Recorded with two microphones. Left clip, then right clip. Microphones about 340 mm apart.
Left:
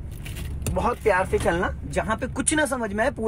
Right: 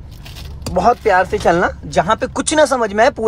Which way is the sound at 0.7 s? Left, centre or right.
Right.